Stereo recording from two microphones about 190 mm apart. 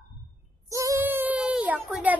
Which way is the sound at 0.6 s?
15° right (ahead or behind).